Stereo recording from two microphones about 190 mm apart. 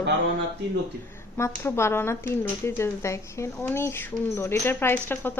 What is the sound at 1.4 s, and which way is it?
Speech, 15° left (ahead or behind).